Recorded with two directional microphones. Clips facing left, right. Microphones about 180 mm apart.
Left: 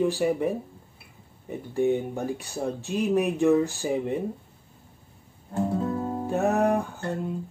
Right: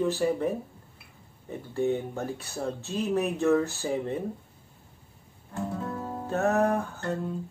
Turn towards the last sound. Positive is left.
turn(degrees=15)  # may be behind; listen again after turning